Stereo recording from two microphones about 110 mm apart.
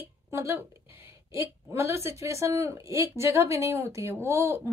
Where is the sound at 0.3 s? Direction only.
25° right (ahead or behind).